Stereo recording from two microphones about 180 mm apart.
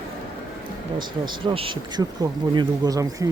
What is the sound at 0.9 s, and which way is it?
Speech, 25° right (ahead or behind).